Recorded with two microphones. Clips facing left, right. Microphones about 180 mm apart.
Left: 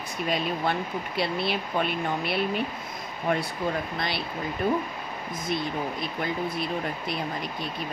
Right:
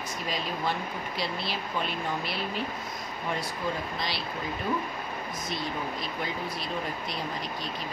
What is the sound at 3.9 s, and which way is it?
Speech, 55° left (ahead or behind).